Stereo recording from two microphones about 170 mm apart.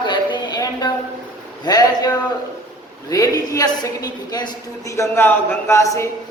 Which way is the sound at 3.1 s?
20° left (ahead or behind).